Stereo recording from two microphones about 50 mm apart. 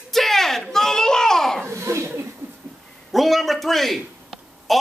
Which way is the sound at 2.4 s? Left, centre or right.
Right.